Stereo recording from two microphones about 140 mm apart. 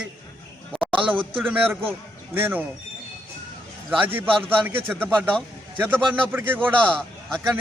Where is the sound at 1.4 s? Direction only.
15° right (ahead or behind).